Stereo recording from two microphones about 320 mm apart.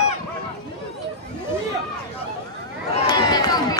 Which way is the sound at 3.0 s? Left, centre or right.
Centre.